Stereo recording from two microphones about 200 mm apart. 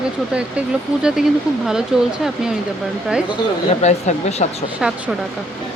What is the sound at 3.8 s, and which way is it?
Speech, 35° left (ahead or behind).